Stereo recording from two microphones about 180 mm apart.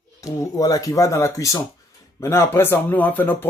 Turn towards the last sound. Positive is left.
turn(degrees=10)  # may be behind; listen again after turning